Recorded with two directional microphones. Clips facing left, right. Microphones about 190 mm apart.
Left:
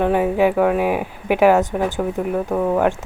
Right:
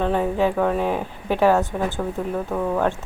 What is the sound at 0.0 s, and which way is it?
Speech, 15° left (ahead or behind).